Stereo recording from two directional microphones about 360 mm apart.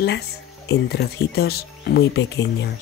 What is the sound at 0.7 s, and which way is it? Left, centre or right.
Speech, left.